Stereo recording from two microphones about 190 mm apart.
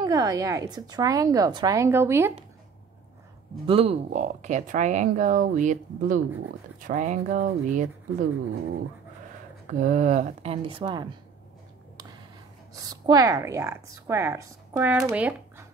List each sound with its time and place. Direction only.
0.0 s a woman's voice: 20° right (ahead or behind)
3.6 s speech: 30° right (ahead or behind)
9.7 s speech: 40° right (ahead or behind); by 11.1 s 25° right (ahead or behind)
12.7 s a woman's voice: 20° right (ahead or behind)